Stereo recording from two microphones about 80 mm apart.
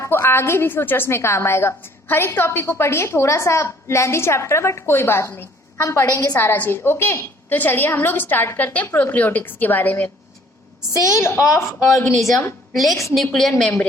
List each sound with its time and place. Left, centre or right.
0.0 s a woman's voice: left
6.3 s a woman's voice: left
10.9 s a woman's voice: left
11.2 s a woman's voice: left
11.4 s a woman's voice: left
12.1 s a woman's voice: centre